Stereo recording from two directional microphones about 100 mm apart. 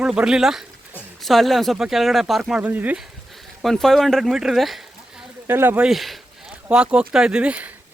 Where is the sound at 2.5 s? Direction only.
15° right (ahead or behind).